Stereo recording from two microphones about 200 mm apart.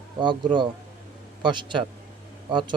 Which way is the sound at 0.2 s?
25° right (ahead or behind).